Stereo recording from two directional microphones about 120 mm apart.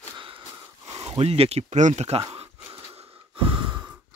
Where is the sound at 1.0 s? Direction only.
55° right (ahead or behind).